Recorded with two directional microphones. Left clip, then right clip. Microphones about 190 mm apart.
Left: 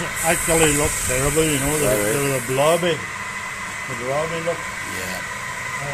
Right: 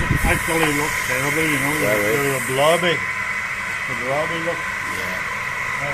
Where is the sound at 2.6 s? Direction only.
20° left (ahead or behind).